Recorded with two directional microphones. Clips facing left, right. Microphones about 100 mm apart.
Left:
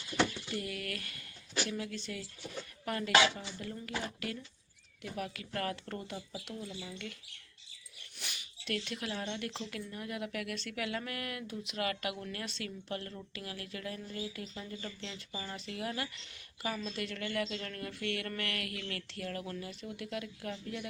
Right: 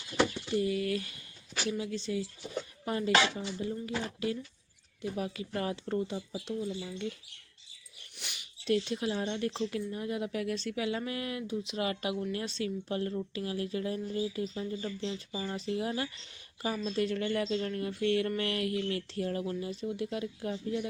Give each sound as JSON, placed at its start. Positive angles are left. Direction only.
{"t": 0.5, "sound": "speech", "side_deg": -20}
{"t": 6.6, "sound": "speech", "side_deg": -10}
{"t": 8.6, "sound": "speech", "side_deg": -35}
{"t": 15.5, "sound": "speech", "side_deg": -30}